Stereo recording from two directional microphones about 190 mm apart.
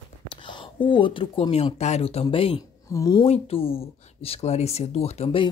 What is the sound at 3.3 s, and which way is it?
Speech, 30° left (ahead or behind).